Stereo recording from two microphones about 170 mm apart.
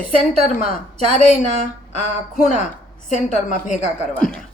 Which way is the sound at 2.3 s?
50° left (ahead or behind).